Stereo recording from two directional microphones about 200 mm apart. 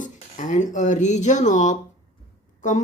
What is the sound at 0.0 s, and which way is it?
Speech, 40° left (ahead or behind).